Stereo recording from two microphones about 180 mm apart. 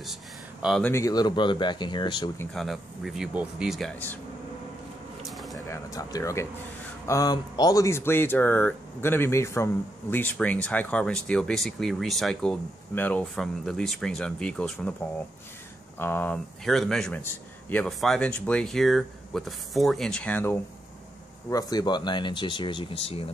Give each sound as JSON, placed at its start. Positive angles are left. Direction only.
{"t": 0.0, "sound": "a sound", "side_deg": 0}
{"t": 0.8, "sound": "speech", "side_deg": 15}
{"t": 2.5, "sound": "speech", "side_deg": 0}
{"t": 5.3, "sound": "a sound", "side_deg": 0}
{"t": 5.7, "sound": "speech", "side_deg": 20}
{"t": 16.0, "sound": "speech", "side_deg": 10}
{"t": 21.5, "sound": "speech", "side_deg": 20}